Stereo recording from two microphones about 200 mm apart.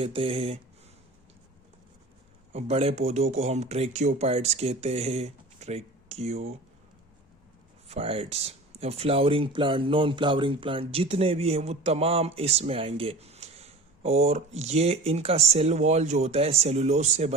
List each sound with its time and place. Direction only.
0.0 s speech: 25° right (ahead or behind)
2.5 s speech: 30° right (ahead or behind)
7.9 s speech: 30° right (ahead or behind)